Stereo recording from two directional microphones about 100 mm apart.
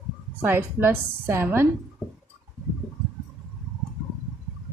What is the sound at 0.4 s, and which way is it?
Speech, 20° right (ahead or behind).